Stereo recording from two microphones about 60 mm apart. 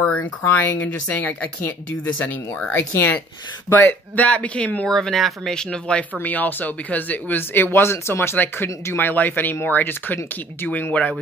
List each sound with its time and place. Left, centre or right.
0.0 s a sound: left
0.4 s speech: left
2.7 s speech: left
3.7 s speech: left
4.2 s speech: left
4.8 s speech: centre
6.1 s speech: left
8.9 s speech: left
10.7 s speech: left